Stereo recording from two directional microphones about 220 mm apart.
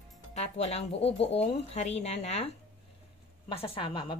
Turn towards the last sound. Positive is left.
turn(degrees=25)  # may be behind; listen again after turning